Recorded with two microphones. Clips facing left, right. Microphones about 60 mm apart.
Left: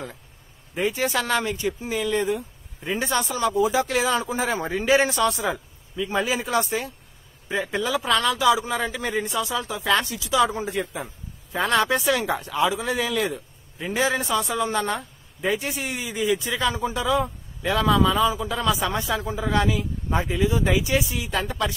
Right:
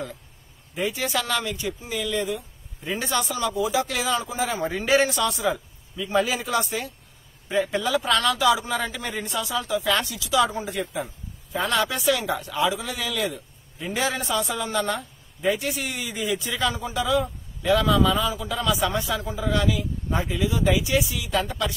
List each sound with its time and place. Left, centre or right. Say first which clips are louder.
0.7 s speech: left 2 dB; left
4.7 s speech: left 1 dB; centre
5.0 s speech: left 1 dB; left
5.9 s speech: right 1 dB; left
7.4 s speech: right 1 dB; centre
9.6 s speech: even; left
11.5 s speech: left 3 dB; left
14.1 s speech: left 2 dB; centre
14.6 s speech: left 2 dB; left
15.4 s speech: right 1 dB; centre
16.7 s speech: left 1 dB; left